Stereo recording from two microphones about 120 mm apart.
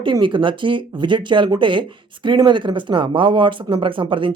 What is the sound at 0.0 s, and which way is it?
Speech, 40° right (ahead or behind).